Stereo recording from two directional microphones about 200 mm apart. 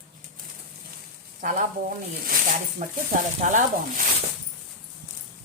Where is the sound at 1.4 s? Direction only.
40° right (ahead or behind).